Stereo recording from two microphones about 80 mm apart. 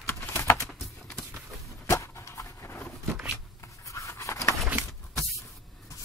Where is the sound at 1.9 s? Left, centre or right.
Left.